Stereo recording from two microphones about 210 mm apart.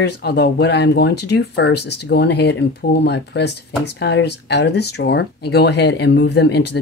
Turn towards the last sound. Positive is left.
turn(degrees=55)  # may be behind; listen again after turning